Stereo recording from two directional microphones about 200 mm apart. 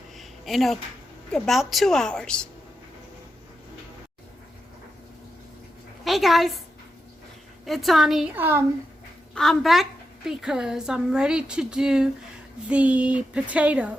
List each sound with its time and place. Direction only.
0.2 s a sound: centre (ahead or behind)
1.3 s a woman's voice: centre (ahead or behind)
6.1 s a woman's voice: centre (ahead or behind)
7.6 s a woman's voice: centre (ahead or behind)
9.3 s a woman's voice: centre (ahead or behind)